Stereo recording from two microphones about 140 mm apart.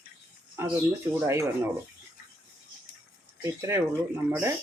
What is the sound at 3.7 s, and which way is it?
Speech, 15° right (ahead or behind).